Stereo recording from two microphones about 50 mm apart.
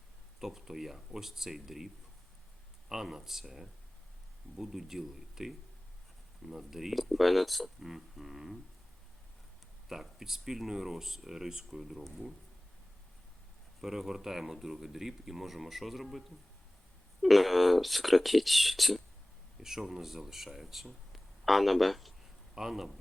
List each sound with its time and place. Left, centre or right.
0.3 s speech: centre
2.9 s speech: centre
9.9 s speech: centre
13.8 s speech: centre
17.2 s speech: centre